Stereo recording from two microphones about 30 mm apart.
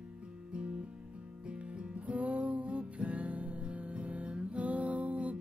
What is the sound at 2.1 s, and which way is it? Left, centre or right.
Music, right.